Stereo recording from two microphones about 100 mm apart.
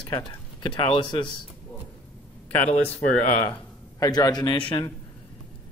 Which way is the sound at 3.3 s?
90° left.